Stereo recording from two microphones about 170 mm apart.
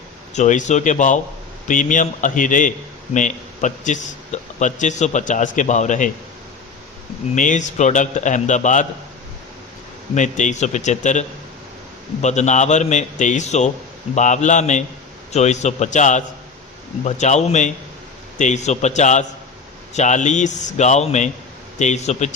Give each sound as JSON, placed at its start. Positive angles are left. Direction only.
{"t": 0.3, "sound": "a man's voice", "side_deg": 45}
{"t": 7.3, "sound": "a man's voice", "side_deg": 50}
{"t": 10.2, "sound": "a man's voice", "side_deg": 45}